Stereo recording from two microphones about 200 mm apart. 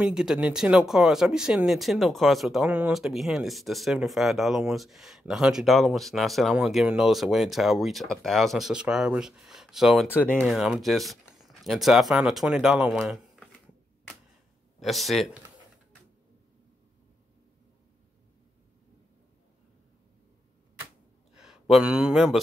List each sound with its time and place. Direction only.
0.0 s speech: 5° right (ahead or behind)
10.0 s speech: 10° left (ahead or behind)
14.8 s speech: centre (ahead or behind)
21.4 s speech: centre (ahead or behind)